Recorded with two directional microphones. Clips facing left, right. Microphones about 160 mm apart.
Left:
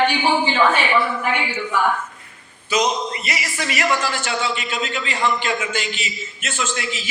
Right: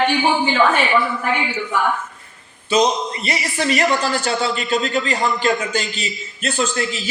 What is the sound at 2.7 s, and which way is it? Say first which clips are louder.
A man's voice: right 3 dB; 30° right (ahead or behind).